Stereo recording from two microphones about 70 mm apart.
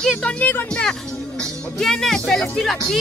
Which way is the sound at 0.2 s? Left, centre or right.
Centre.